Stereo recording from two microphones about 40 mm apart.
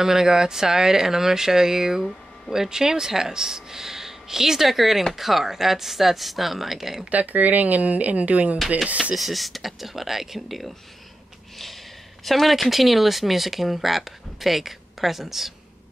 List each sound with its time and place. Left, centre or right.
0.0 s speech: centre
7.1 s speech: right
9.1 s speech: centre
12.3 s speech: centre